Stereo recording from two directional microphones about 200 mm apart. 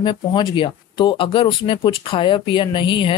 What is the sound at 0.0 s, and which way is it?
Speech, 25° left (ahead or behind).